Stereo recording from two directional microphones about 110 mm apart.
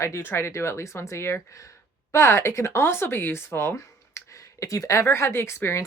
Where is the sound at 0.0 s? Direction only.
25° left (ahead or behind).